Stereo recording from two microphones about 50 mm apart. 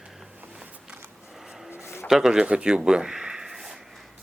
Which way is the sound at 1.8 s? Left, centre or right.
Left.